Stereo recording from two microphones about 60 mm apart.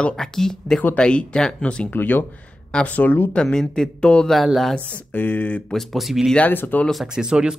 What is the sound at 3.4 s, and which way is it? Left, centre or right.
Speech, centre.